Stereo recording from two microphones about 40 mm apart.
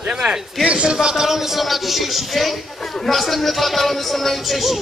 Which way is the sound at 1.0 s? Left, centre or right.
Centre.